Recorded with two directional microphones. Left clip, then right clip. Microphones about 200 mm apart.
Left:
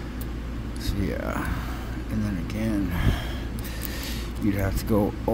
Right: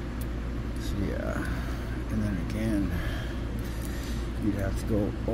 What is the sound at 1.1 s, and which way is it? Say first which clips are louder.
Speech: left 4 dB; 25° left (ahead or behind).